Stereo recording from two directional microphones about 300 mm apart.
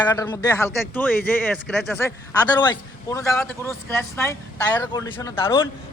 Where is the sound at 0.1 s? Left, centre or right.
Centre.